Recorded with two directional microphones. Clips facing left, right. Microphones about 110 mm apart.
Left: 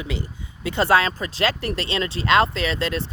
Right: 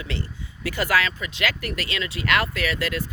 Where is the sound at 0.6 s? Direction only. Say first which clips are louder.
Left 4 dB; 25° left (ahead or behind).